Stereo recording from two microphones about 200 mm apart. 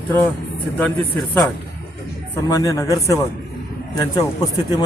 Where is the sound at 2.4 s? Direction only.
15° left (ahead or behind).